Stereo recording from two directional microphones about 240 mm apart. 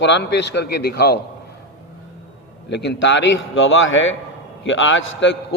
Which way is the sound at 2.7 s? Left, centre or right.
Left.